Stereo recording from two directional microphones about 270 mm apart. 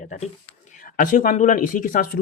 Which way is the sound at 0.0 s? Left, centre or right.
Left.